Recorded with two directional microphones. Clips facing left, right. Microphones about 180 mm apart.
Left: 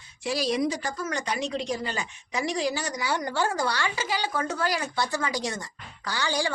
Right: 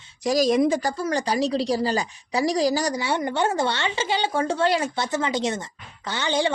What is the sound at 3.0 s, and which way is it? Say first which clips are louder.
A woman's voice: right 4 dB; 25° right (ahead or behind).